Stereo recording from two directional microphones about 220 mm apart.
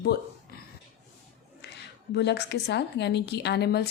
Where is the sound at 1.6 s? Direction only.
50° left (ahead or behind).